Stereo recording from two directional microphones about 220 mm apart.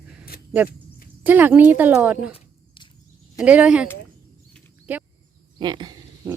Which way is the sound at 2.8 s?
25° left (ahead or behind).